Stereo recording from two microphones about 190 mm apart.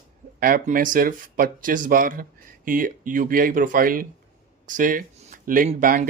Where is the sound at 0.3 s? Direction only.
50° right (ahead or behind).